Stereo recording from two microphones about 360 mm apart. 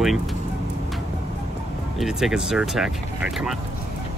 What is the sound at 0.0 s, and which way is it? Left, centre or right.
Speech, centre.